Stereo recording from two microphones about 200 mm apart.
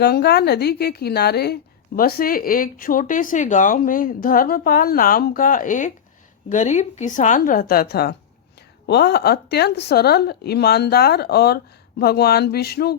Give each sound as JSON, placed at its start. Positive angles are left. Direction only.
{"t": 0.0, "sound": "a woman's voice", "side_deg": 55}